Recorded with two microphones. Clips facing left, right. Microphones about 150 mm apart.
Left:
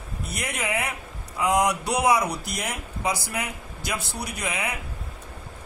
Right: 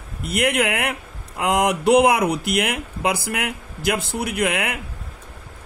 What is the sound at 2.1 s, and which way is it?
Speech, 60° right (ahead or behind).